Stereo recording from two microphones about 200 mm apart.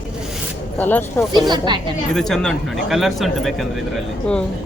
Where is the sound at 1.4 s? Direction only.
20° right (ahead or behind).